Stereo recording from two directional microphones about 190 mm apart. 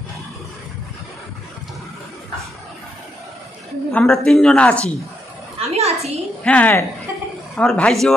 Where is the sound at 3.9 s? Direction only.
5° left (ahead or behind).